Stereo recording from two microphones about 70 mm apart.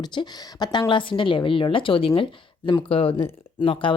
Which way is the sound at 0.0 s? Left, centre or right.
Left.